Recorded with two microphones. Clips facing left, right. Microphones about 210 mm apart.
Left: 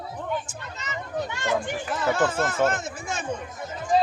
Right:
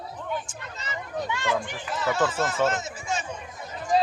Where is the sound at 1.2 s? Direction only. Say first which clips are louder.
Even; 45° left (ahead or behind).